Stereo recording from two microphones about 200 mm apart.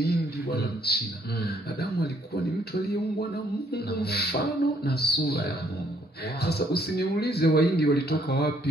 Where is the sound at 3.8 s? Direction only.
50° left (ahead or behind).